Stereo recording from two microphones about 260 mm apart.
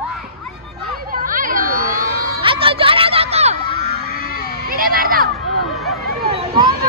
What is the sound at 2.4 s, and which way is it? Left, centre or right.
Music, centre.